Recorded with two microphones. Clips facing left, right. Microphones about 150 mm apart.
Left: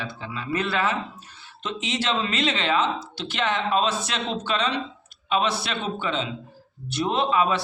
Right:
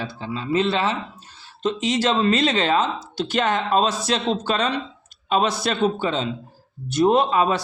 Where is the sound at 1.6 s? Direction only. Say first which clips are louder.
Right 7 dB; 40° right (ahead or behind).